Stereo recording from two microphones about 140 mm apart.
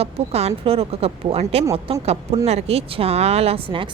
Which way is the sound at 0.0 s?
50° right (ahead or behind).